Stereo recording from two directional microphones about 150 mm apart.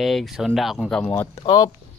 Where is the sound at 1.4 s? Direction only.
25° left (ahead or behind).